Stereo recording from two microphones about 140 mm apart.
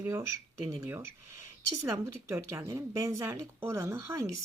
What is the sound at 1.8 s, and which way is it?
Speech, 20° right (ahead or behind).